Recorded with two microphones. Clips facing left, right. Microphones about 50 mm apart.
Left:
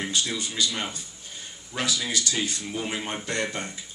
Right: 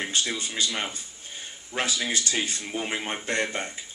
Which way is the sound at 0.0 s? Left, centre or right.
Right.